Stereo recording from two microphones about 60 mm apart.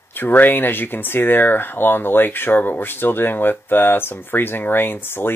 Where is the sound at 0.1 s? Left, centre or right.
Left.